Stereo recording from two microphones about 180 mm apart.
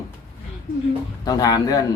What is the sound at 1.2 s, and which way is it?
Speech, 20° left (ahead or behind).